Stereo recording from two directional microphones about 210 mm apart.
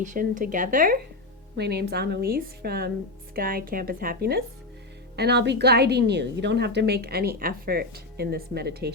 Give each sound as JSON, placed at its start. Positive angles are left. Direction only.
{"t": 0.0, "sound": "speech", "side_deg": -40}
{"t": 1.5, "sound": "a woman's voice", "side_deg": -50}